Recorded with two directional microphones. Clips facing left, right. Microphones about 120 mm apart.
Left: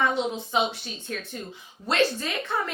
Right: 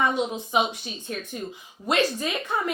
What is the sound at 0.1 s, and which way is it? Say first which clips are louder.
Speech: right 1 dB; 15° right (ahead or behind).